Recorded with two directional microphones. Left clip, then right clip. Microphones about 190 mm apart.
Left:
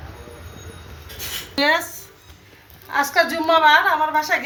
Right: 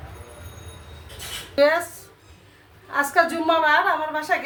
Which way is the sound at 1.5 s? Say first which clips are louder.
Even; 35° right (ahead or behind).